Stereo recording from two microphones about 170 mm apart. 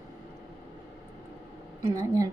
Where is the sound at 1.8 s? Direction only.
15° right (ahead or behind).